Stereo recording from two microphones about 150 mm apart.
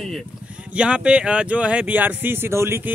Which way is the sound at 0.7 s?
5° right (ahead or behind).